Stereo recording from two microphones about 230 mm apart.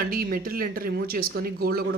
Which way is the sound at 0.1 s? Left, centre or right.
Right.